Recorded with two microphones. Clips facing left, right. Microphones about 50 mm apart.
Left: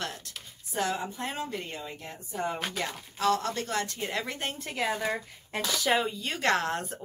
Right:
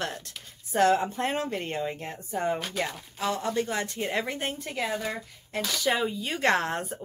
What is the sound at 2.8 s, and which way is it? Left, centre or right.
A woman's voice, centre.